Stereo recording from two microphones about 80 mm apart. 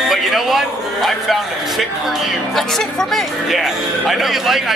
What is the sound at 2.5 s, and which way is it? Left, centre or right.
Speech, centre.